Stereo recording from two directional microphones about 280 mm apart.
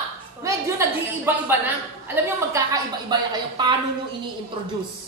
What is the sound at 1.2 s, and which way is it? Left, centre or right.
Speech, centre.